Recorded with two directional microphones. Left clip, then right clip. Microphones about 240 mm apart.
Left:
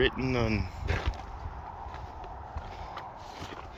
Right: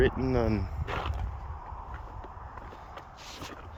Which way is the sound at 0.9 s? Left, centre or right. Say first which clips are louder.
Right 1 dB; centre.